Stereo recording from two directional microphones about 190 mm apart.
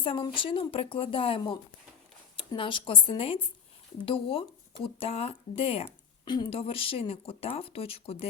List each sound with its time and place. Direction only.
0.0 s a woman's voice: 25° left (ahead or behind)